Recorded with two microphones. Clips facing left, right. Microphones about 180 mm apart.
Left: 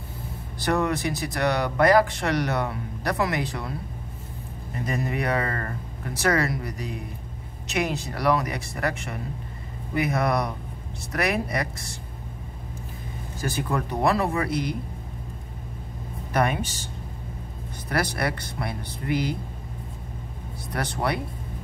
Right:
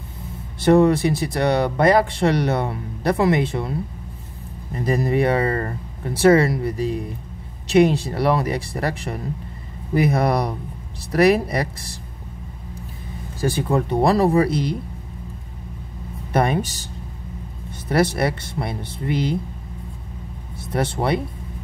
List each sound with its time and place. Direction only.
0.6 s speech: 30° right (ahead or behind)
4.8 s speech: 35° right (ahead or behind)
13.4 s speech: 30° right (ahead or behind)
16.3 s speech: 35° right (ahead or behind)
17.8 s speech: 25° right (ahead or behind)
20.7 s speech: 25° right (ahead or behind)